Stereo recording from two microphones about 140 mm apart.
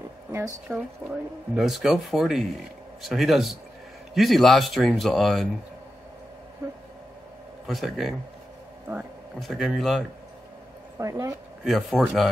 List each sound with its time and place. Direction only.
0.3 s a woman's voice: 15° right (ahead or behind)
1.5 s speech: centre (ahead or behind)
7.6 s speech: centre (ahead or behind)
9.4 s speech: centre (ahead or behind)
11.0 s speech: 20° right (ahead or behind)
11.6 s speech: centre (ahead or behind)